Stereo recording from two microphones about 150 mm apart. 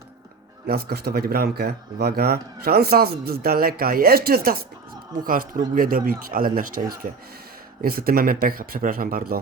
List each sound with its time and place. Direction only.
0.7 s speech: 90° right
5.2 s speech: 70° right (ahead or behind)